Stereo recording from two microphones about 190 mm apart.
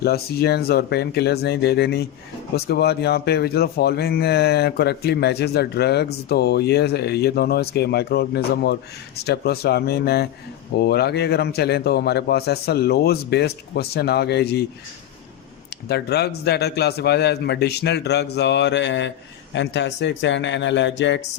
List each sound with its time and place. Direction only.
0.0 s speech: 55° left (ahead or behind)
15.9 s speech: 60° left (ahead or behind)